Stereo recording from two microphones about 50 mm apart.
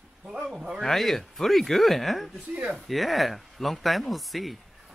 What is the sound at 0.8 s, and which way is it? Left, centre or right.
Speech, centre.